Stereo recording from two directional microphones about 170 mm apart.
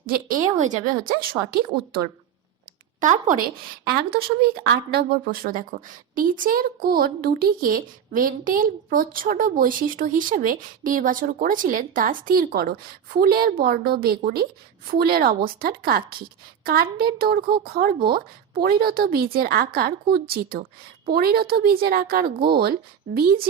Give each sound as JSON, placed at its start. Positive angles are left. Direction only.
{"t": 0.0, "sound": "speech", "side_deg": -55}
{"t": 1.2, "sound": "a woman's voice", "side_deg": -60}
{"t": 3.0, "sound": "speech", "side_deg": -50}
{"t": 4.9, "sound": "a woman's voice", "side_deg": -65}